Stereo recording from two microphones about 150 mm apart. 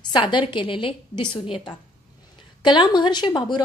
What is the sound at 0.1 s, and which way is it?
A woman's voice, 35° left (ahead or behind).